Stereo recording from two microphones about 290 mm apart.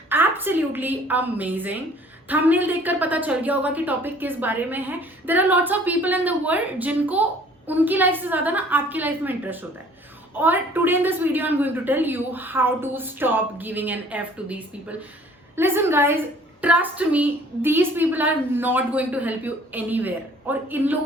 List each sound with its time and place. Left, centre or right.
0.1 s a woman's voice: centre